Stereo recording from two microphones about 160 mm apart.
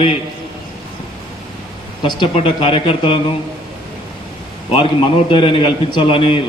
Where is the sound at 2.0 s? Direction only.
30° left (ahead or behind).